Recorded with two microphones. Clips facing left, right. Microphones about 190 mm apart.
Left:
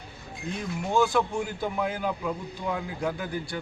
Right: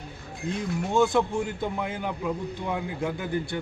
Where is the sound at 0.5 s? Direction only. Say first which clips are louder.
Right 1 dB; 20° right (ahead or behind).